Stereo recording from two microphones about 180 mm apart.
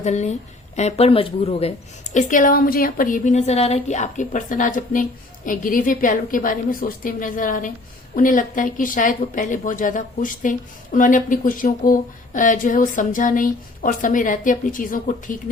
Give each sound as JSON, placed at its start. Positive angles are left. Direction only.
{"t": 0.0, "sound": "speech", "side_deg": 40}
{"t": 2.1, "sound": "a woman's voice", "side_deg": 45}